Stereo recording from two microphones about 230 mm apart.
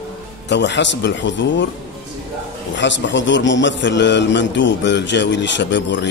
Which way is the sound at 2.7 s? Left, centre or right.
Left.